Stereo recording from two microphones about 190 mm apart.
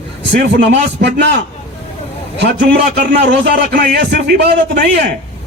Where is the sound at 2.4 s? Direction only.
60° right (ahead or behind).